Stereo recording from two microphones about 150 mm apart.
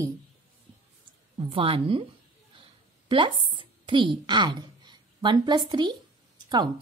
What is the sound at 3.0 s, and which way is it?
A woman's voice, 30° right (ahead or behind).